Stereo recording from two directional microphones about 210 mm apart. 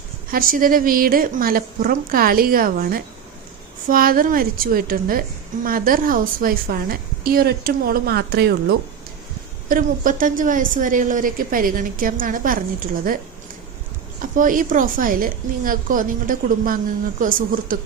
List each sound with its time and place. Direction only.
0.3 s a woman's voice: 45° right (ahead or behind)
9.6 s a woman's voice: 40° right (ahead or behind)
14.2 s a woman's voice: 40° right (ahead or behind)